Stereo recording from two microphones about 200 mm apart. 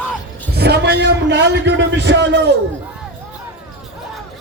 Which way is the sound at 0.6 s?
55° right (ahead or behind).